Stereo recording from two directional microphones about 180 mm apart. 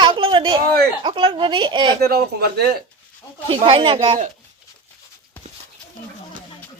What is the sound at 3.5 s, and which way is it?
Speech, 30° right (ahead or behind).